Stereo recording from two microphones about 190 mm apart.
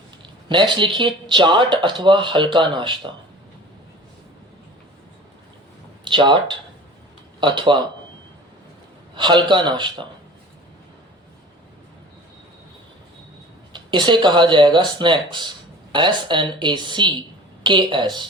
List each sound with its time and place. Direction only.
0.4 s speech: 25° right (ahead or behind)
6.1 s speech: 25° right (ahead or behind)
9.1 s speech: 25° right (ahead or behind)
13.7 s speech: 25° right (ahead or behind)